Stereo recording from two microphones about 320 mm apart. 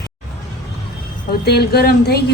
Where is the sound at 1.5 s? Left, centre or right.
Left.